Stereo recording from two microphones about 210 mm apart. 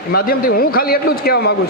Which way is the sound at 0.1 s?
45° left (ahead or behind).